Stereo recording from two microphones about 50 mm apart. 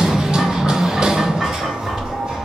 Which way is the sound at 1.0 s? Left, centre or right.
Centre.